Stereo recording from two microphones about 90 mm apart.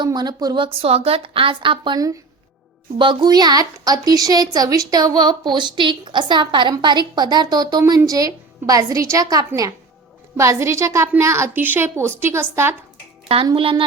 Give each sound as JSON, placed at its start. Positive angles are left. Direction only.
{"t": 0.0, "sound": "a woman's voice", "side_deg": -50}
{"t": 0.6, "sound": "a woman's voice", "side_deg": -90}
{"t": 3.0, "sound": "a woman's voice", "side_deg": -65}
{"t": 3.2, "sound": "a woman's voice", "side_deg": -45}
{"t": 13.2, "sound": "a woman's voice", "side_deg": -75}